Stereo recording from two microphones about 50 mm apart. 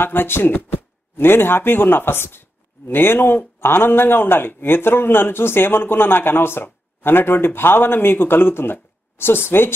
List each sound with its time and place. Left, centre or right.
0.0 s speech: left